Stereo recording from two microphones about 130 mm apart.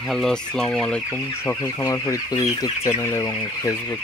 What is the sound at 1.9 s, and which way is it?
Speech, 30° left (ahead or behind).